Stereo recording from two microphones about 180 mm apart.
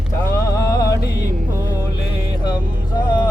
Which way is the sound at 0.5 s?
20° left (ahead or behind).